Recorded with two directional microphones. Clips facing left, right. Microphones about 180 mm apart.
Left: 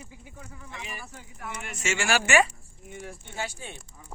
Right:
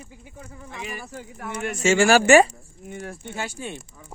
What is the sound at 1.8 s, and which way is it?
Speech, 35° right (ahead or behind).